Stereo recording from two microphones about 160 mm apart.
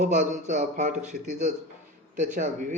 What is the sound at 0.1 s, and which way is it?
Speech, 50° right (ahead or behind).